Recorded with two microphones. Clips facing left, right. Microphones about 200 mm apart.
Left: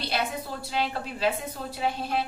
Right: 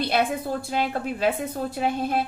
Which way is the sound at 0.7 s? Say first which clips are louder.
Right 1 dB; 50° right (ahead or behind).